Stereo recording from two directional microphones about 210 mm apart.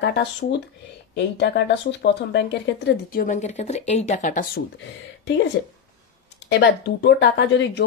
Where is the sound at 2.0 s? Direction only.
55° left (ahead or behind); by 4.6 s 40° left (ahead or behind).